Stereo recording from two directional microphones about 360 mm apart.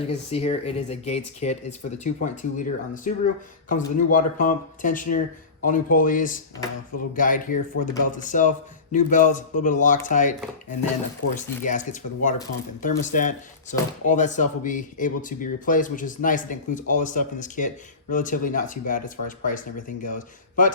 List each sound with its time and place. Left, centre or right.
0.1 s speech: centre